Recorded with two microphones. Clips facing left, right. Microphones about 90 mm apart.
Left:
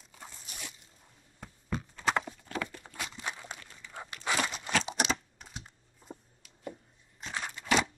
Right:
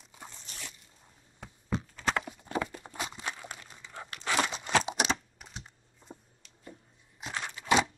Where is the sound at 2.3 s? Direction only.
20° right (ahead or behind).